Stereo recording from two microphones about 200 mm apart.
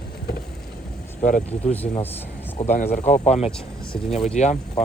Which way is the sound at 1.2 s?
40° left (ahead or behind).